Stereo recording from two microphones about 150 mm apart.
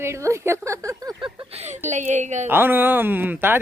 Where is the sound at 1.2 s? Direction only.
45° right (ahead or behind).